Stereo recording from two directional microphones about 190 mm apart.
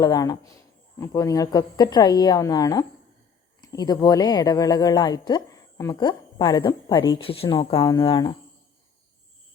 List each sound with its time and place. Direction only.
0.0 s a woman's voice: 20° left (ahead or behind)